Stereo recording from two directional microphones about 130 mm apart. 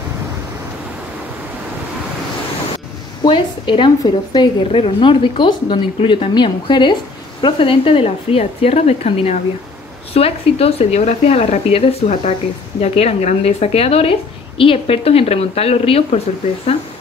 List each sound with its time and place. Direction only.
3.3 s a woman's voice: 40° left (ahead or behind)